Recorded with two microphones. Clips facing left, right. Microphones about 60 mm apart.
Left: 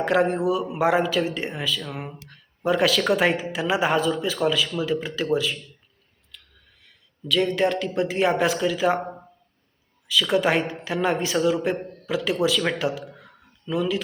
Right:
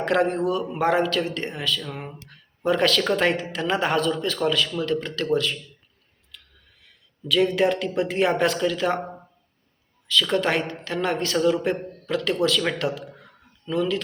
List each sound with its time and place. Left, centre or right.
0.0 s speech: centre
6.3 s a sound: centre
6.8 s speech: centre